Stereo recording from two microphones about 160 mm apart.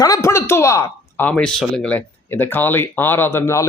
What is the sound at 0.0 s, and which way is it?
Speech, 20° left (ahead or behind).